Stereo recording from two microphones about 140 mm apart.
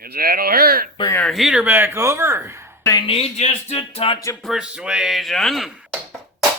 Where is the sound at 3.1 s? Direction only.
50° left (ahead or behind).